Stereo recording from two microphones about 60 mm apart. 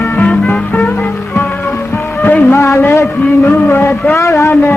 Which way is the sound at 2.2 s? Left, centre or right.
Left.